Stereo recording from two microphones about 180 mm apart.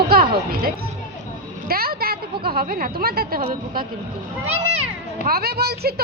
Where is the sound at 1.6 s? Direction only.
55° right (ahead or behind).